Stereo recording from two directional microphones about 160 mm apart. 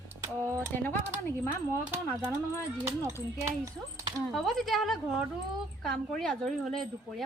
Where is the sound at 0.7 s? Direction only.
10° left (ahead or behind).